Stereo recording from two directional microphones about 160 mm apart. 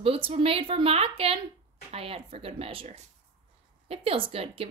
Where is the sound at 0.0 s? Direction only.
35° right (ahead or behind).